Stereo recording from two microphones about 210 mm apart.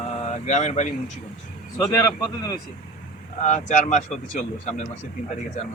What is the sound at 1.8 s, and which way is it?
Speech, 15° left (ahead or behind).